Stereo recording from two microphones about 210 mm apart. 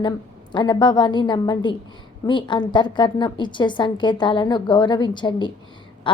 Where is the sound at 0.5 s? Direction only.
20° left (ahead or behind).